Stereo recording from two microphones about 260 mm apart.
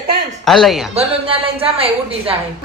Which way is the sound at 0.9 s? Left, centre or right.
Right.